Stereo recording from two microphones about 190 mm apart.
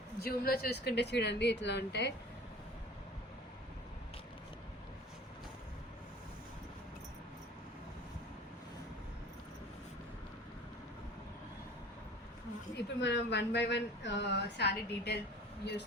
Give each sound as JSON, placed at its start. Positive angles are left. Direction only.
{"t": 0.2, "sound": "speech", "side_deg": 55}
{"t": 12.7, "sound": "speech", "side_deg": 65}